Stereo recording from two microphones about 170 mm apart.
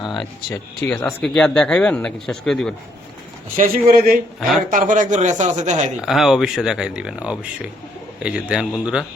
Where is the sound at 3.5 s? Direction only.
55° right (ahead or behind).